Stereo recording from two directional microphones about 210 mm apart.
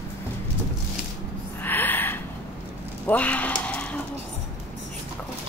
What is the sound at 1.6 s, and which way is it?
Gasp, 10° left (ahead or behind).